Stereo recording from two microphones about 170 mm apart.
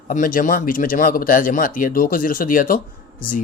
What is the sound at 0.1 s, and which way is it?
Speech, 55° left (ahead or behind).